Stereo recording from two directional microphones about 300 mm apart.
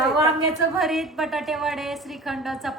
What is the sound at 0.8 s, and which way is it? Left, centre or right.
A woman's voice, centre.